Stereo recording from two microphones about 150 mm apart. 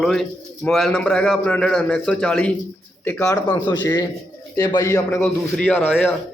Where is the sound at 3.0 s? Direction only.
20° left (ahead or behind).